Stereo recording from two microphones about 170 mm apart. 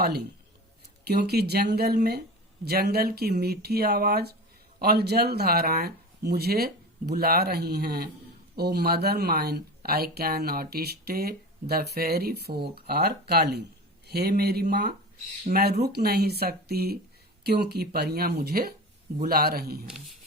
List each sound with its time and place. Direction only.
1.0 s speech: 75° right (ahead or behind)
15.5 s speech: 40° right (ahead or behind)
15.8 s speech: 75° right (ahead or behind)